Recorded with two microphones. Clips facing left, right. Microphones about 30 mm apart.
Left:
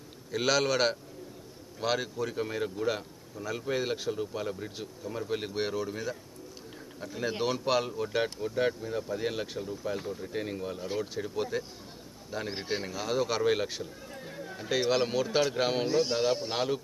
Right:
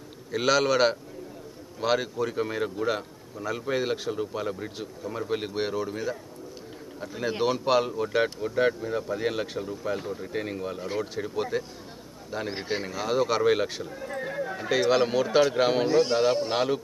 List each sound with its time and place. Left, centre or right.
0.3 s speech: centre
14.0 s a sound: right
14.6 s speech: centre